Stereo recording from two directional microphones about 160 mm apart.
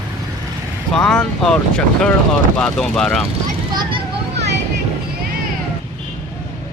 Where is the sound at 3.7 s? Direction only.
25° right (ahead or behind).